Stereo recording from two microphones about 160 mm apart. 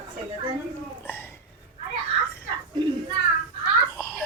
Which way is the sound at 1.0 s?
15° left (ahead or behind).